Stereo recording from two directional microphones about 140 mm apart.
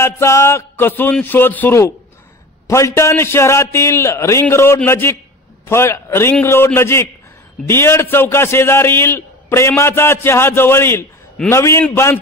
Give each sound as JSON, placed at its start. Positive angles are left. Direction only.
{"t": 0.0, "sound": "a man's voice", "side_deg": 20}